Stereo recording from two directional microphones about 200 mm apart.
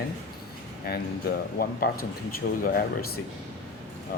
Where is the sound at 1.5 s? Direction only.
45° left (ahead or behind).